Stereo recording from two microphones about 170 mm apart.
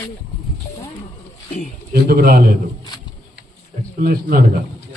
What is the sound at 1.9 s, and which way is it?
Speech, 65° right (ahead or behind).